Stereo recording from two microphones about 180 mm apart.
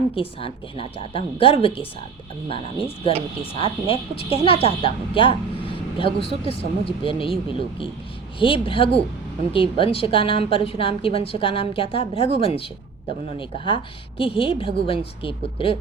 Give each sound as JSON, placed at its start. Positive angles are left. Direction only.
{"t": 0.2, "sound": "a woman's voice", "side_deg": 30}
{"t": 8.4, "sound": "a woman's voice", "side_deg": 30}